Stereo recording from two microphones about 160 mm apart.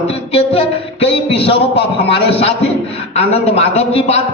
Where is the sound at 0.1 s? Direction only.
40° left (ahead or behind).